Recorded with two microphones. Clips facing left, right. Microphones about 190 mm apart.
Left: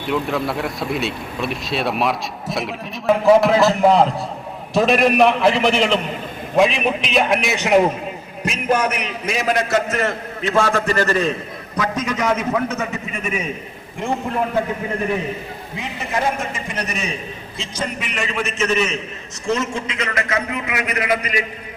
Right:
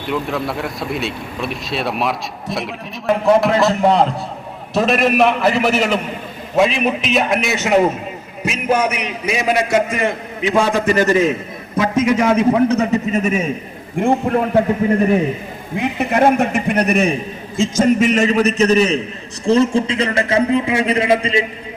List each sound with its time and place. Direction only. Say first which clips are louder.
0.0 s a man's voice: even; centre (ahead or behind); by 13.5 s 40° right (ahead or behind)
15.7 s a man's voice: right 8 dB; 60° right (ahead or behind)
17.6 s a man's voice: right 14 dB; 45° right (ahead or behind); by 21.4 s 25° right (ahead or behind)